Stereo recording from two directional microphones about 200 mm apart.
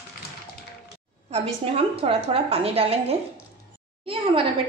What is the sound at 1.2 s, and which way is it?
A woman's voice, 30° right (ahead or behind).